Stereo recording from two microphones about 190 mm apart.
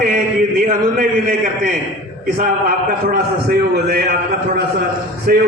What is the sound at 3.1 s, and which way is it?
Speech, 55° right (ahead or behind).